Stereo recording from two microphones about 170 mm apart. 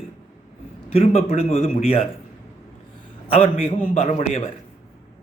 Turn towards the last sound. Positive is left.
turn(degrees=40)  # may be behind; listen again after turning